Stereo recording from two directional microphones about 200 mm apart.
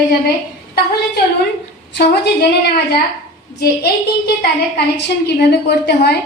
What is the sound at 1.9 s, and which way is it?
A woman's voice, 55° left (ahead or behind).